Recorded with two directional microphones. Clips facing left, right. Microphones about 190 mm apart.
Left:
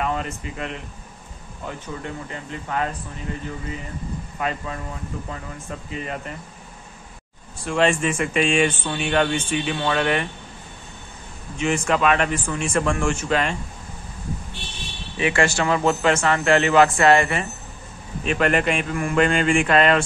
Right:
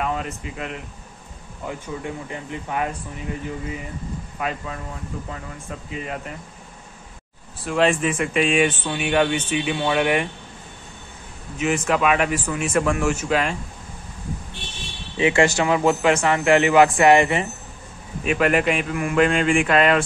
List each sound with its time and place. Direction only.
0.0 s speech: 5° right (ahead or behind)
1.7 s a man's voice: 15° right (ahead or behind)
4.4 s speech: 5° right (ahead or behind)
7.6 s speech: centre (ahead or behind)
11.5 s speech: 5° right (ahead or behind)
15.1 s a man's voice: 20° right (ahead or behind)
18.2 s speech: 5° right (ahead or behind)